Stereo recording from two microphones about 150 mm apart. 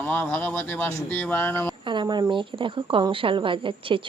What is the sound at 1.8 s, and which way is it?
Speech, 30° right (ahead or behind).